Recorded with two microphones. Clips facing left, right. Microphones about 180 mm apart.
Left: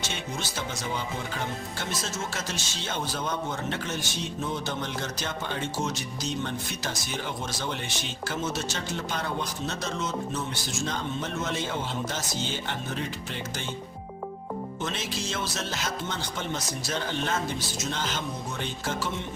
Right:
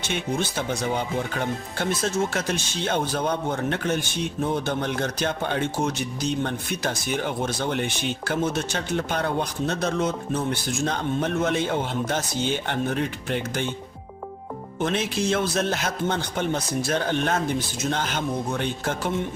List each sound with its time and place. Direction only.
0.1 s speech: 55° right (ahead or behind)
14.8 s speech: 55° right (ahead or behind)